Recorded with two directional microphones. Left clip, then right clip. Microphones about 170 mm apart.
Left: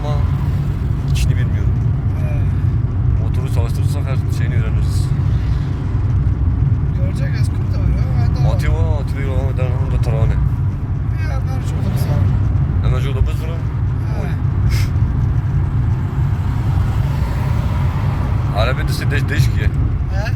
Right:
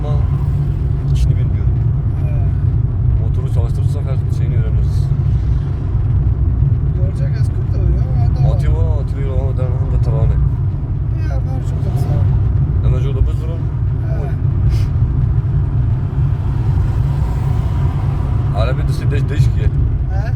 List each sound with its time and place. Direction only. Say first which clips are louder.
18.5 s vehicle: left 3 dB; 10° right (ahead or behind)